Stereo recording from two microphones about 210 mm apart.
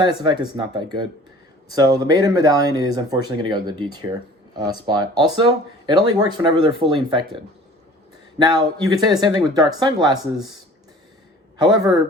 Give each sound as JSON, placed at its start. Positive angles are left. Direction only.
{"t": 0.0, "sound": "speech", "side_deg": -25}
{"t": 11.5, "sound": "speech", "side_deg": -20}